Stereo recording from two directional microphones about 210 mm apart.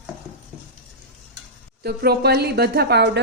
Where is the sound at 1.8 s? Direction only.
50° right (ahead or behind).